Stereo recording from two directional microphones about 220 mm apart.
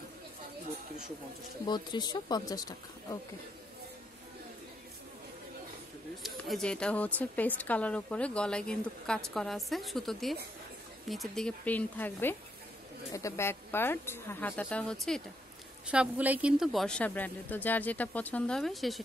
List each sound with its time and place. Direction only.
1.7 s speech: 20° left (ahead or behind)
6.2 s a woman's voice: centre (ahead or behind)